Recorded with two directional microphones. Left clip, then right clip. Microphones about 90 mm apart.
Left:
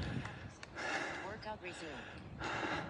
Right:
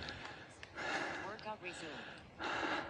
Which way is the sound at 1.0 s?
15° right (ahead or behind).